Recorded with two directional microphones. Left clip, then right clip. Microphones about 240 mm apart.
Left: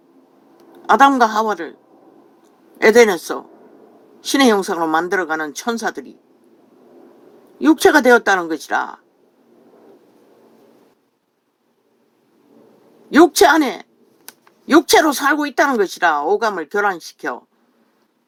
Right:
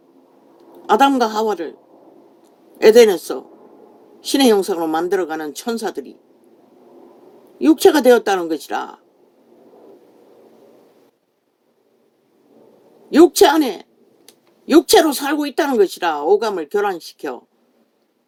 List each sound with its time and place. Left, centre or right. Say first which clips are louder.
0.9 s speech: left 3 dB; left
2.7 s speech: right 1 dB; left
7.6 s speech: even; left
13.4 s speech: left 1 dB; left